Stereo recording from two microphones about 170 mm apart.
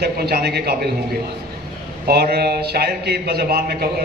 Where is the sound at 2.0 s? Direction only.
65° right (ahead or behind).